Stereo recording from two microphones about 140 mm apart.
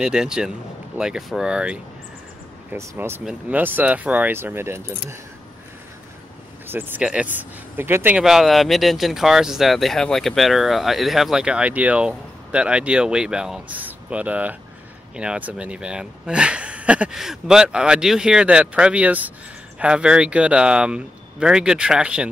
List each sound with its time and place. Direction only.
0.0 s speech: 5° right (ahead or behind)
6.7 s speech: 15° right (ahead or behind)
8.2 s speech: 5° right (ahead or behind)